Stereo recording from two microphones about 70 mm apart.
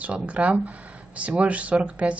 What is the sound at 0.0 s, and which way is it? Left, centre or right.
Speech, centre.